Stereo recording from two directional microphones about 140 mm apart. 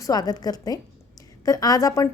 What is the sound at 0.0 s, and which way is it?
A woman's voice, 25° left (ahead or behind).